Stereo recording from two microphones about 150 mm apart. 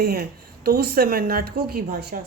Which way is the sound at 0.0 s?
90° right.